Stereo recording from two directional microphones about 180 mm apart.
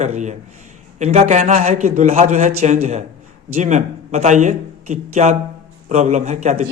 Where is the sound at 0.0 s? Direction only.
40° right (ahead or behind).